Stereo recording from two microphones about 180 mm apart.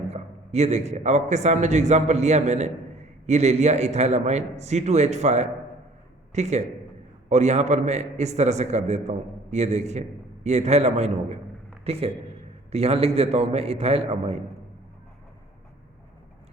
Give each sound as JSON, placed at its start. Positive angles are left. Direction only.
{"t": 0.1, "sound": "a man's voice", "side_deg": -40}